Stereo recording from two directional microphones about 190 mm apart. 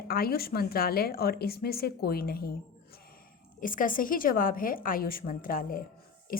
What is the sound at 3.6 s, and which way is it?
Speech, 45° left (ahead or behind).